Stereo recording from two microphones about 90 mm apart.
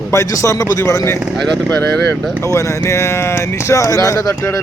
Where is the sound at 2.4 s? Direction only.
35° left (ahead or behind).